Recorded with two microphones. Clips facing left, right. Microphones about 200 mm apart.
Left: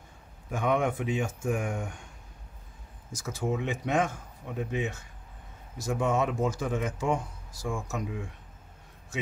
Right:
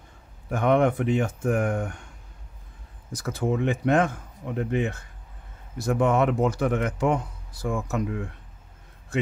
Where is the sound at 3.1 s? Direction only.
60° right (ahead or behind).